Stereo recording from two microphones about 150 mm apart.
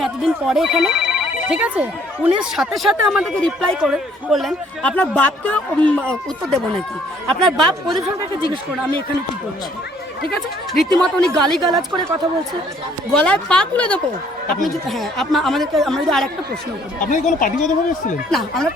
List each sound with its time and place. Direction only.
0.0 s speech: centre (ahead or behind)
10.3 s speech: 5° left (ahead or behind)
13.1 s a woman's voice: 5° left (ahead or behind)
17.0 s speech: 60° left (ahead or behind)
18.3 s speech: centre (ahead or behind)